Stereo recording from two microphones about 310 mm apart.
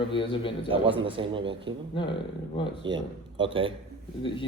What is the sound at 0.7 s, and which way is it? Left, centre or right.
A man's voice, centre.